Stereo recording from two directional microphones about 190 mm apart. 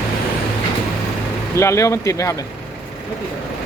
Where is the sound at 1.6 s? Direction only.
15° left (ahead or behind).